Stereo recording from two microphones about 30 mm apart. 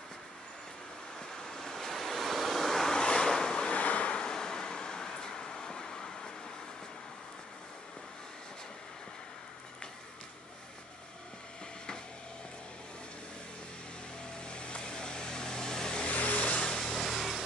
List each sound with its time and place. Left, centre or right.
1.4 s waves: centre
2.9 s waves: left
3.7 s waves: left
4.1 s vehicle: left
14.4 s vehicle: left
16.1 s vehicle: left
16.6 s a sound: centre
16.9 s a sound: centre